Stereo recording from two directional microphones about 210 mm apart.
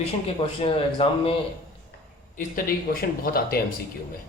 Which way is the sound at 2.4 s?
40° left (ahead or behind).